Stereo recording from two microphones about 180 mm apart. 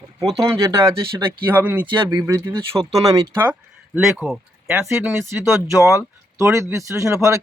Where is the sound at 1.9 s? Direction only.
20° right (ahead or behind); by 4.8 s centre (ahead or behind).